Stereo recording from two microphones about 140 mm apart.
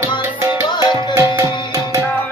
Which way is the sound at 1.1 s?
20° right (ahead or behind).